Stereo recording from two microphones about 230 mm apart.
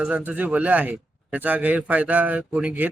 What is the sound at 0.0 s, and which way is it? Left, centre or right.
A man's voice, centre.